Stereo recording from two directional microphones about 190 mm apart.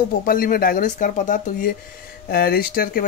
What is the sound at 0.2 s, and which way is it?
Speech, 50° left (ahead or behind).